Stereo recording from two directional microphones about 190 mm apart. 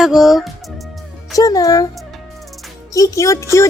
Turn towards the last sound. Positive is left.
turn(degrees=15)  # may be behind; listen again after turning